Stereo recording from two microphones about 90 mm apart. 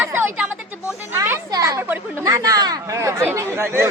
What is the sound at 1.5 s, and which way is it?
Speech, 40° right (ahead or behind).